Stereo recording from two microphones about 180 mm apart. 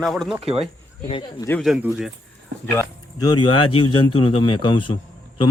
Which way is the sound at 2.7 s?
20° left (ahead or behind).